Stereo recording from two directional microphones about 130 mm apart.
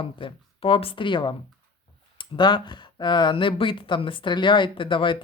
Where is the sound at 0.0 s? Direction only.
45° left (ahead or behind).